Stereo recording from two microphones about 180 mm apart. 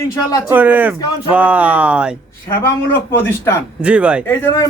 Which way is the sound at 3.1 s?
10° left (ahead or behind).